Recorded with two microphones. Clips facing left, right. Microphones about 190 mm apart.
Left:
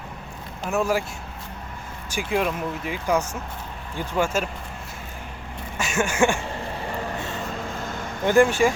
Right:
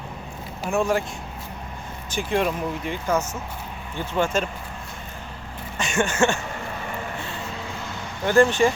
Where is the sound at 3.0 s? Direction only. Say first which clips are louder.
Left 1 dB; 15° left (ahead or behind).